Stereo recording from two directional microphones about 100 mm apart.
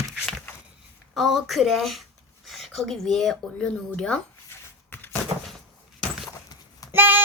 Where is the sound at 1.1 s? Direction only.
5° right (ahead or behind).